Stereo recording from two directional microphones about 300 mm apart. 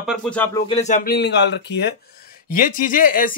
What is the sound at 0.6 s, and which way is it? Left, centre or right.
Speech, left.